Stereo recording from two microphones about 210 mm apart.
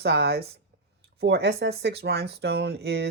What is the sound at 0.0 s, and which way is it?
Speech, 50° right (ahead or behind).